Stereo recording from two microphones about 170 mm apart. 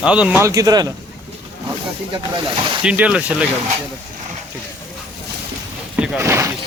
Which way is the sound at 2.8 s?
5° right (ahead or behind).